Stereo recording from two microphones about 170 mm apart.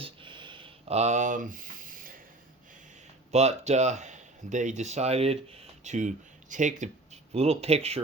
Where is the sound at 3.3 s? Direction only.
40° right (ahead or behind).